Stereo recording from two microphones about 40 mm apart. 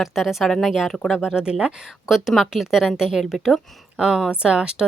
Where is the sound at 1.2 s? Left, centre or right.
Right.